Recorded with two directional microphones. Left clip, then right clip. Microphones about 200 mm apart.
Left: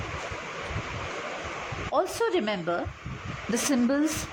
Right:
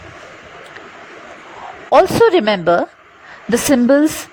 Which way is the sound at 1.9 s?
45° right (ahead or behind).